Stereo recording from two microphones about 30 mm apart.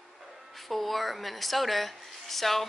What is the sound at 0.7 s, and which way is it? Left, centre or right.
Speech, centre.